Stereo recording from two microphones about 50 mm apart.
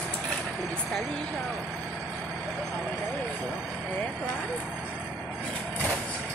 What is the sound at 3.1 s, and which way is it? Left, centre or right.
Speech, left.